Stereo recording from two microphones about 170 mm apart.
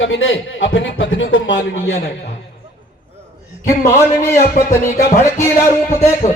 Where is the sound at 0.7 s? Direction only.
90° left.